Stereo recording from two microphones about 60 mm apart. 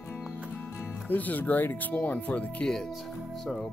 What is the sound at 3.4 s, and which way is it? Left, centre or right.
Speech, centre.